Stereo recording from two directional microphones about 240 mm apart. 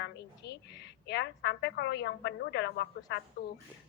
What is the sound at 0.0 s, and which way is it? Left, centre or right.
A woman's voice, left.